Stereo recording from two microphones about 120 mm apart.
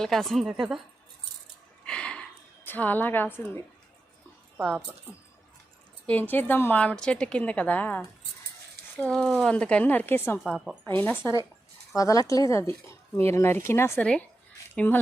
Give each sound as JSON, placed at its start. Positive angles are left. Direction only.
{"t": 0.0, "sound": "a woman's voice", "side_deg": 0}
{"t": 1.8, "sound": "a sound", "side_deg": 10}
{"t": 2.6, "sound": "a woman's voice", "side_deg": 15}
{"t": 4.5, "sound": "speech", "side_deg": -15}
{"t": 6.3, "sound": "a woman's voice", "side_deg": 15}
{"t": 10.4, "sound": "a woman's voice", "side_deg": -5}
{"t": 10.9, "sound": "a woman's voice", "side_deg": 15}
{"t": 11.9, "sound": "speech", "side_deg": 30}
{"t": 14.0, "sound": "a woman's voice", "side_deg": 10}